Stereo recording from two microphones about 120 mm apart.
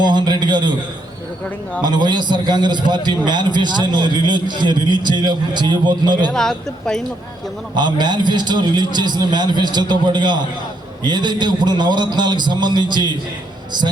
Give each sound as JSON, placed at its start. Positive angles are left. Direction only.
{"t": 0.0, "sound": "a sound", "side_deg": -40}
{"t": 1.8, "sound": "a man's voice", "side_deg": -35}
{"t": 6.3, "sound": "speech", "side_deg": 5}
{"t": 7.8, "sound": "a man's voice", "side_deg": -40}